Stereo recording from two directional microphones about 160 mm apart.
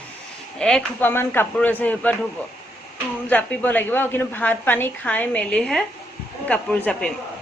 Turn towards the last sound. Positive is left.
turn(degrees=10)  # may be behind; listen again after turning